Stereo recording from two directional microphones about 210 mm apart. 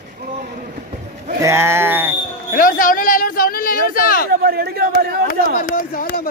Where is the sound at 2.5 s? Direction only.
40° left (ahead or behind).